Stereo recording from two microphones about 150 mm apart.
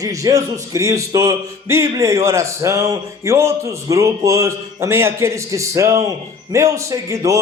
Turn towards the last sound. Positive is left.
turn(degrees=-20)  # may be behind; listen again after turning